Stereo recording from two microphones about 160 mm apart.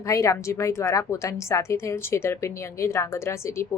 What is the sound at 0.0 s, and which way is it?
A woman's voice, 20° left (ahead or behind).